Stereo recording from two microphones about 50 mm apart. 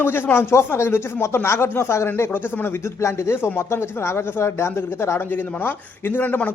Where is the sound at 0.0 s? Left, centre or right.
Left.